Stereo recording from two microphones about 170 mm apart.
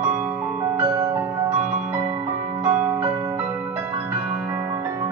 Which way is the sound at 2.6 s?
10° right (ahead or behind).